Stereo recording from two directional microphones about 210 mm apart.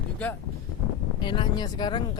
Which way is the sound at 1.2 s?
20° left (ahead or behind).